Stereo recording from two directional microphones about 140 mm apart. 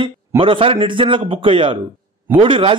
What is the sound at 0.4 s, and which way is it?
A man's voice, 40° right (ahead or behind).